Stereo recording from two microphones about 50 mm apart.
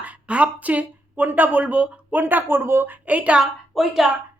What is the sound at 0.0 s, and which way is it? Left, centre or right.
Speech, right.